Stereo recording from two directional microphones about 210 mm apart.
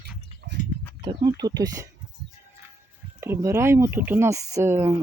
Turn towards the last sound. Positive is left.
turn(degrees=-10)  # may be behind; listen again after turning